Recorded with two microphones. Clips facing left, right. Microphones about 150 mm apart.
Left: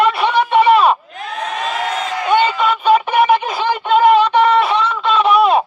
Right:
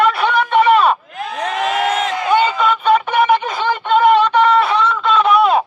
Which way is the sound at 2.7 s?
10° left (ahead or behind).